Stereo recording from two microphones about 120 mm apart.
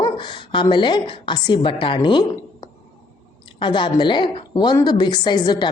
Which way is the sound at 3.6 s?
40° left (ahead or behind).